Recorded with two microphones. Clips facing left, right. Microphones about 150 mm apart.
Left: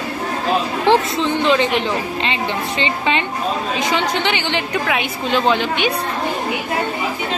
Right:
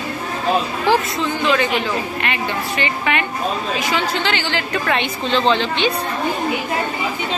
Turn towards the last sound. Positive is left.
turn(degrees=10)  # may be behind; listen again after turning